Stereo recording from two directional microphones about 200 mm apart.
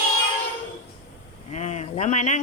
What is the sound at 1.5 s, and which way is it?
Speech, 35° left (ahead or behind).